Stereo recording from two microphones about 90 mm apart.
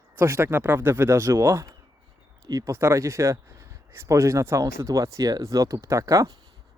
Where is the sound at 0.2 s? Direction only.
25° right (ahead or behind).